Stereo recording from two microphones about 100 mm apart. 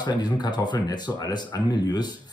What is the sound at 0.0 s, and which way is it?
Speech, 45° left (ahead or behind).